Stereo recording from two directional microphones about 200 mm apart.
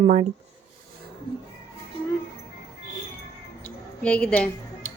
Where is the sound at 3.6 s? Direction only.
5° left (ahead or behind).